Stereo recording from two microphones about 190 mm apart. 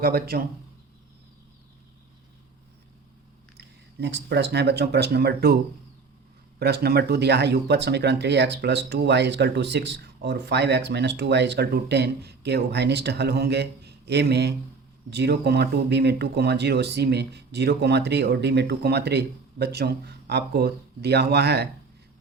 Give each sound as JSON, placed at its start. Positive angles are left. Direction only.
{"t": 0.0, "sound": "speech", "side_deg": -55}
{"t": 3.9, "sound": "speech", "side_deg": -65}
{"t": 6.6, "sound": "speech", "side_deg": -55}